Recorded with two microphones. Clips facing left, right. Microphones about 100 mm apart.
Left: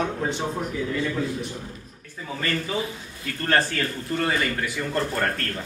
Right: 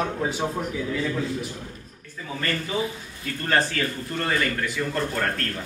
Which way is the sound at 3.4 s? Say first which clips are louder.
Even; centre (ahead or behind).